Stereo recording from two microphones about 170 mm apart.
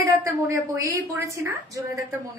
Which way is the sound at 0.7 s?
20° right (ahead or behind).